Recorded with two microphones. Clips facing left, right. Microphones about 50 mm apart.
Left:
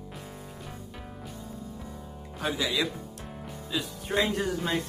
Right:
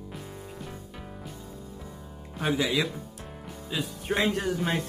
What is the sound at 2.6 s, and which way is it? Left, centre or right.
Speech, centre.